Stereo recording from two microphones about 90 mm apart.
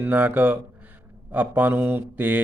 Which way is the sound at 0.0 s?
20° right (ahead or behind).